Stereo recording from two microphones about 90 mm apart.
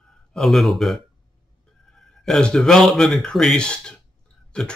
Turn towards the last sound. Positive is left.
turn(degrees=10)  # may be behind; listen again after turning